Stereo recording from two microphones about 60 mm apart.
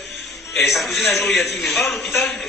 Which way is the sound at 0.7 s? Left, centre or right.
Centre.